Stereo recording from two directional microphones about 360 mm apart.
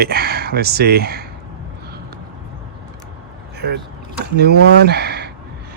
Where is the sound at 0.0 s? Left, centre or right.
Right.